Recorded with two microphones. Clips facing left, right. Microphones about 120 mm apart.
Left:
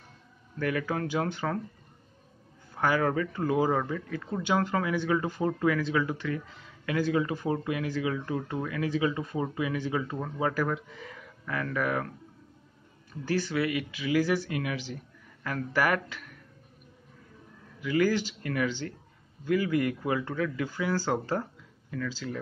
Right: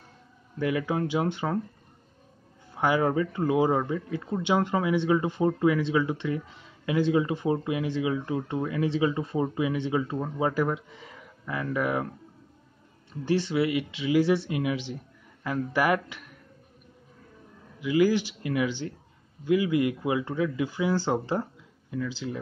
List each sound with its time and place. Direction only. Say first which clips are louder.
0.6 s speech: right 3 dB; 15° right (ahead or behind)
2.7 s speech: right 2 dB; 15° right (ahead or behind)
13.2 s speech: right 3 dB; 25° right (ahead or behind)
17.7 s speech: right 3 dB; 15° right (ahead or behind)